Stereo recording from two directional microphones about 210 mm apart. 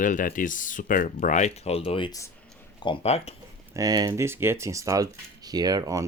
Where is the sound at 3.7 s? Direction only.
15° right (ahead or behind).